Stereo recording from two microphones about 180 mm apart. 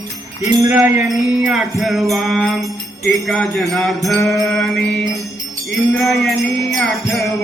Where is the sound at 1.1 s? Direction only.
5° right (ahead or behind).